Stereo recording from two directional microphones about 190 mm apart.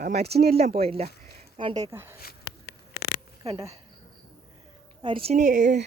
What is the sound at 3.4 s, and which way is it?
Speech, 15° right (ahead or behind).